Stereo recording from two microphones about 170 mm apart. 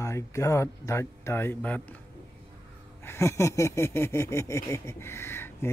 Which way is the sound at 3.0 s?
15° left (ahead or behind).